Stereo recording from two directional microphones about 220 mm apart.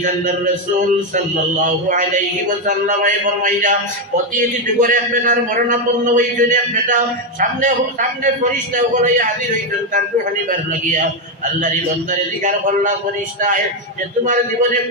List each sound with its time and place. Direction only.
0.7 s a man's voice: 35° right (ahead or behind)
14.2 s a man's voice: 35° right (ahead or behind)